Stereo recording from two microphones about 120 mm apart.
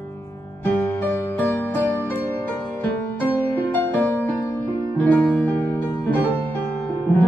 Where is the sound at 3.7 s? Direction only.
15° left (ahead or behind).